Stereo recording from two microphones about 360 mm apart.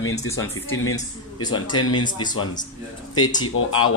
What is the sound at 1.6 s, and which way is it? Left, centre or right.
A man's voice, centre.